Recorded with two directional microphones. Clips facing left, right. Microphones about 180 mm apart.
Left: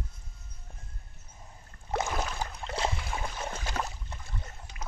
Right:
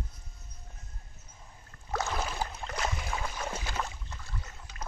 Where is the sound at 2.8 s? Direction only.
30° left (ahead or behind).